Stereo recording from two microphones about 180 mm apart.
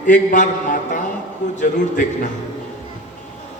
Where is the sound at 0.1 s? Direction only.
45° left (ahead or behind).